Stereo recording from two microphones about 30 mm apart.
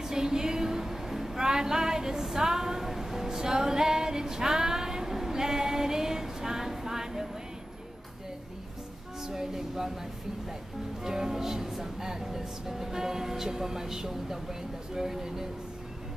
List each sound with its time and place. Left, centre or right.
0.0 s a sound: centre
3.3 s female singing: centre
9.2 s speech: centre
11.1 s speech: centre